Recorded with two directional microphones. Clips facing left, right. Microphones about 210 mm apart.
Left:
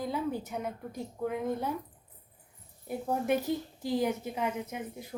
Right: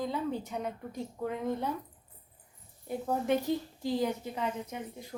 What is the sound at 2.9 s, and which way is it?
A woman's voice, 10° left (ahead or behind).